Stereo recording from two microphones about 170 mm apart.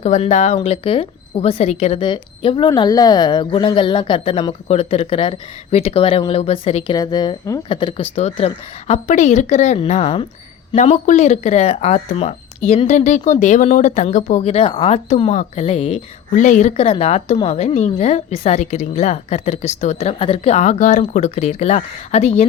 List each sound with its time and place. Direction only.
0.0 s speech: 40° left (ahead or behind)
6.9 s speech: 25° left (ahead or behind)
16.3 s speech: 45° left (ahead or behind)